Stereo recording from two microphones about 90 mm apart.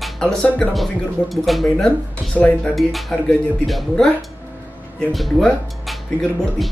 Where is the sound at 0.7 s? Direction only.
Centre (ahead or behind).